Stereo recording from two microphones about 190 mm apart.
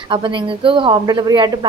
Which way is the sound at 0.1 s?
25° right (ahead or behind).